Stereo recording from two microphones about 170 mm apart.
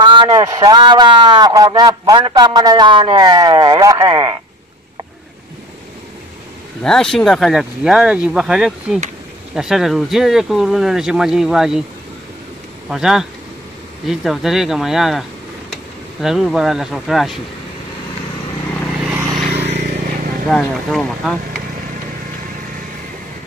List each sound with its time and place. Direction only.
0.0 s a man's voice: 25° right (ahead or behind)
6.8 s speech: 5° left (ahead or behind)
12.8 s speech: 5° right (ahead or behind)
19.0 s vehicle: 5° right (ahead or behind)
20.4 s speech: 5° left (ahead or behind)